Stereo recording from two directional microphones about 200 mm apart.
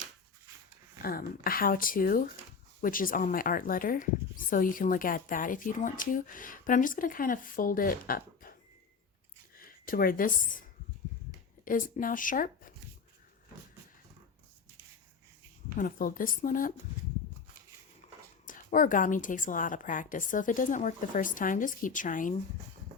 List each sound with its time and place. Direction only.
1.0 s speech: 45° left (ahead or behind)
9.6 s speech: 45° left (ahead or behind)
15.7 s speech: 45° left (ahead or behind)
18.0 s whispering: 35° left (ahead or behind)
18.4 s a woman's voice: 40° left (ahead or behind)